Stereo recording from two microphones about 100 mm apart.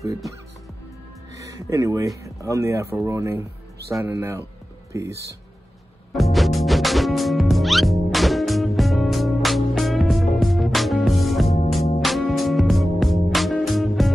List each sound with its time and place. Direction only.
1.3 s music: 35° right (ahead or behind)
2.2 s speech: 30° right (ahead or behind)
6.1 s music: centre (ahead or behind)